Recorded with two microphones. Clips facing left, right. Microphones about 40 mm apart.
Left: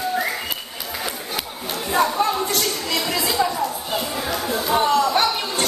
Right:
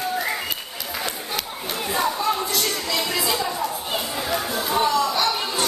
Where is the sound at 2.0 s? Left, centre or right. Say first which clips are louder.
Left 4 dB; left.